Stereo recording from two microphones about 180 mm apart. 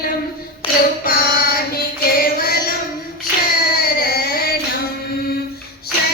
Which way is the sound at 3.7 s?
55° left (ahead or behind).